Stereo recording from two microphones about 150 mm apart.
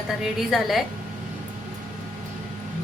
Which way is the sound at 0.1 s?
Centre (ahead or behind).